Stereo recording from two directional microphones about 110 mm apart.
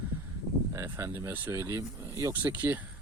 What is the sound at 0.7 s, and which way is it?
Speech, 25° right (ahead or behind).